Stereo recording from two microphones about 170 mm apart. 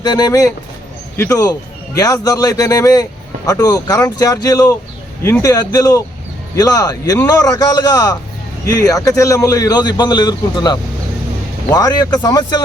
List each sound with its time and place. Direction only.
0.0 s a man's voice: 25° left (ahead or behind)